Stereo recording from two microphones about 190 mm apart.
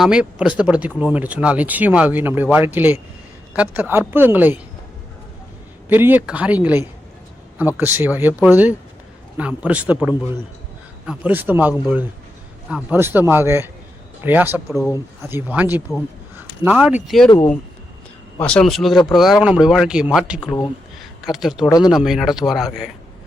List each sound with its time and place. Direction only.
0.0 s speech: 5° right (ahead or behind)
5.9 s speech: 10° right (ahead or behind)
17.2 s speech: 20° left (ahead or behind)
18.3 s speech: 5° left (ahead or behind)
21.0 s a sound: centre (ahead or behind)
21.7 s speech: 20° left (ahead or behind)
21.9 s speech: centre (ahead or behind)